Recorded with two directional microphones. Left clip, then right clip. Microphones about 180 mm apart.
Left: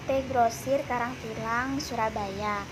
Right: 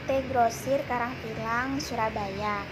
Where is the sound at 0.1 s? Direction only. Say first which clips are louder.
Even; centre (ahead or behind).